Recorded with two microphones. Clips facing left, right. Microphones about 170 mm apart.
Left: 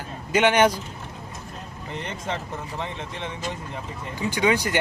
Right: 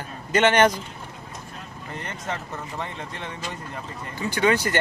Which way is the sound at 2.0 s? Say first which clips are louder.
Left 2 dB; 20° left (ahead or behind).